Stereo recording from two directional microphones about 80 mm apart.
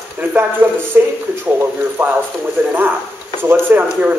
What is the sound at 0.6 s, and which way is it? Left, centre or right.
Speech, right.